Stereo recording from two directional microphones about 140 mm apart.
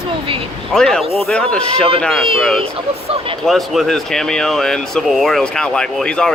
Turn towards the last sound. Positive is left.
turn(degrees=5)  # may be behind; listen again after turning